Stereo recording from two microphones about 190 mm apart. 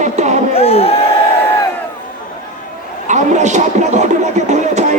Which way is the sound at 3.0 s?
40° right (ahead or behind).